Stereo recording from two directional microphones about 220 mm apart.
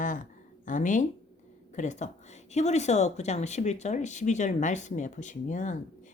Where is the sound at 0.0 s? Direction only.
35° left (ahead or behind).